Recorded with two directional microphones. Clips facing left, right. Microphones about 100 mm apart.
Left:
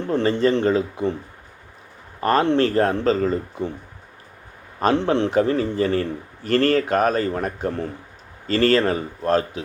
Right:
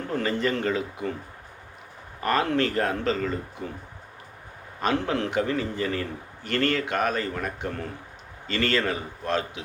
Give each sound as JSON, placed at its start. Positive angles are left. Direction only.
{"t": 0.1, "sound": "speech", "side_deg": 30}
{"t": 2.2, "sound": "a man's voice", "side_deg": 30}
{"t": 4.8, "sound": "a man's voice", "side_deg": 35}